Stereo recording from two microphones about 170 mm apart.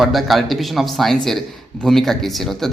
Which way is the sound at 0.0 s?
Centre (ahead or behind).